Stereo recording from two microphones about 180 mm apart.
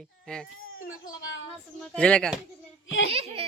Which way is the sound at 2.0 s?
5° left (ahead or behind).